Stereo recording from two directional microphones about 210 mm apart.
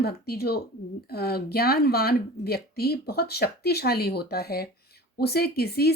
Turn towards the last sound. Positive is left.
turn(degrees=50)  # may be behind; listen again after turning